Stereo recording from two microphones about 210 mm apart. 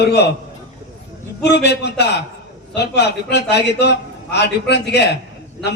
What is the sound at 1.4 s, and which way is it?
A man's voice, 50° left (ahead or behind).